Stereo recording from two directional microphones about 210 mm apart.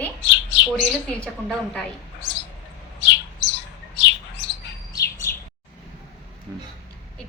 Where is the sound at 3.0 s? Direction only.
60° left (ahead or behind).